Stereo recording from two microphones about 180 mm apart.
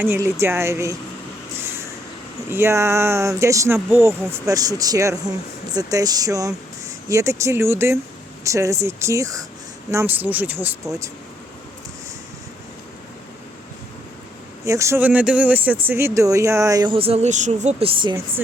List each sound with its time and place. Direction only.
0.0 s speech: 15° right (ahead or behind)
1.6 s vehicle: 15° right (ahead or behind)
2.5 s speech: 15° right (ahead or behind)
14.6 s speech: 15° right (ahead or behind)